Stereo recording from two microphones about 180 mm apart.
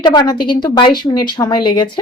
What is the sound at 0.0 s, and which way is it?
Speech, 25° left (ahead or behind).